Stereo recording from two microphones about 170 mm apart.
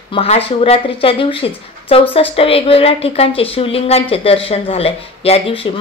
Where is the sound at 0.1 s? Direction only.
35° left (ahead or behind).